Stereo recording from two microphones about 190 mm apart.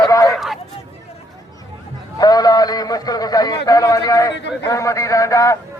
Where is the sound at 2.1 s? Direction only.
20° left (ahead or behind).